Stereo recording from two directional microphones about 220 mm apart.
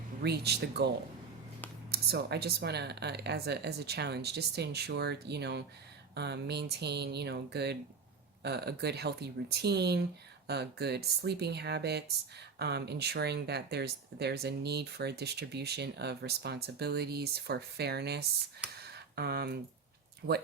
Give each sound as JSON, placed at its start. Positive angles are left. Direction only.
{"t": 0.2, "sound": "speech", "side_deg": -45}
{"t": 1.9, "sound": "speech", "side_deg": -45}
{"t": 18.6, "sound": "speech", "side_deg": -5}
{"t": 19.1, "sound": "speech", "side_deg": -45}